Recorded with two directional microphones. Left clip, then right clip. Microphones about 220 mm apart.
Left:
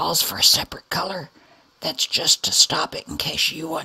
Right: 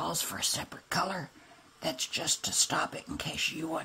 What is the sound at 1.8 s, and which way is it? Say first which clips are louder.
Speech: left 11 dB; 40° left (ahead or behind).